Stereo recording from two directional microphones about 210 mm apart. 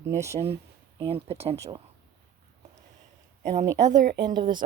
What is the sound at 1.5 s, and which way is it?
Speech, 15° right (ahead or behind).